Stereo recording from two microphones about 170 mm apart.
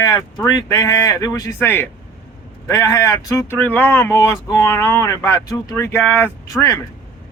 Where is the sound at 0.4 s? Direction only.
20° left (ahead or behind).